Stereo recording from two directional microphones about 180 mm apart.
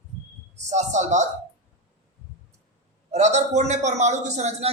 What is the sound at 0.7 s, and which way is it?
Speech, 40° right (ahead or behind).